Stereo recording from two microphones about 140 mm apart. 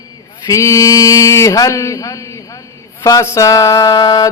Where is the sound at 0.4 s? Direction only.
20° left (ahead or behind).